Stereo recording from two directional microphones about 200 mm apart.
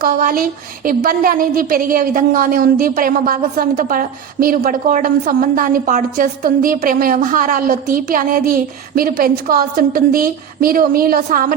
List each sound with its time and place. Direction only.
0.0 s a woman's voice: 45° right (ahead or behind)